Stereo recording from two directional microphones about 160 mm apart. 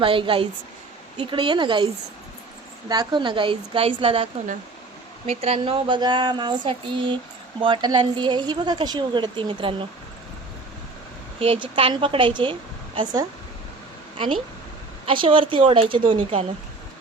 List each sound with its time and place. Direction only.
0.0 s speech: 35° right (ahead or behind)
2.9 s a woman's voice: 25° right (ahead or behind)
11.3 s speech: 35° right (ahead or behind)
15.0 s speech: 30° right (ahead or behind)